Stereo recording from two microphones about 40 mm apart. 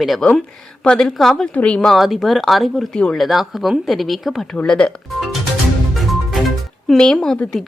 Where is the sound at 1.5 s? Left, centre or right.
Left.